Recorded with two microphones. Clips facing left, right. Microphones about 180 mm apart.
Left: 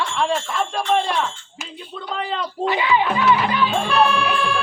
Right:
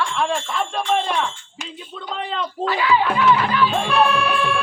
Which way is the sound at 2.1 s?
Centre (ahead or behind).